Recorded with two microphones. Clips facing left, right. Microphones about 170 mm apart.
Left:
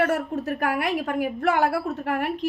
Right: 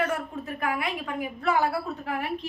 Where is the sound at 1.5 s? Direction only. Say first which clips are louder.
Right 1 dB; 65° left (ahead or behind).